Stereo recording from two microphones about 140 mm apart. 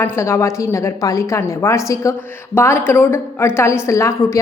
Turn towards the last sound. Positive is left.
turn(degrees=20)  # may be behind; listen again after turning